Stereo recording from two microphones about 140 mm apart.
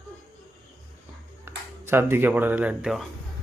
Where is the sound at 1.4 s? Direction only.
15° right (ahead or behind).